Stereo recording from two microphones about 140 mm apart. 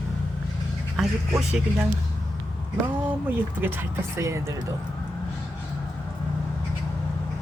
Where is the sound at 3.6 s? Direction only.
15° right (ahead or behind).